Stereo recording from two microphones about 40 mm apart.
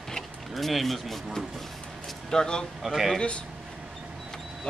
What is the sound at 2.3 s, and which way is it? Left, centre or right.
Speech, centre.